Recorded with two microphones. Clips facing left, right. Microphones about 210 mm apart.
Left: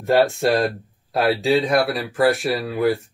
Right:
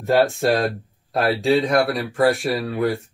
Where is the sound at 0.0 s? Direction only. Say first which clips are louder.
Even; centre (ahead or behind).